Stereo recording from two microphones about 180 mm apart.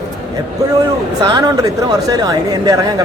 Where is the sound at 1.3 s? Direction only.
25° right (ahead or behind).